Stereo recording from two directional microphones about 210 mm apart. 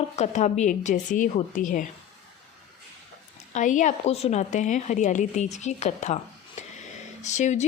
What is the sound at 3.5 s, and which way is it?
Speech, 35° left (ahead or behind).